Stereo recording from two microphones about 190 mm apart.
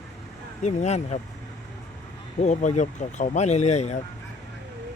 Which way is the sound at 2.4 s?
40° left (ahead or behind).